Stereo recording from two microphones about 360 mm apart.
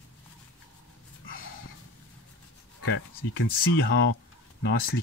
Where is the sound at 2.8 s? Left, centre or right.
Left.